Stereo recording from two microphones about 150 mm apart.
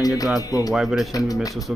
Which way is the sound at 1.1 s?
25° left (ahead or behind).